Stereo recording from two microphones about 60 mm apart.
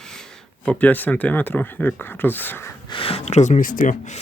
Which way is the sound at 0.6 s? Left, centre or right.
Left.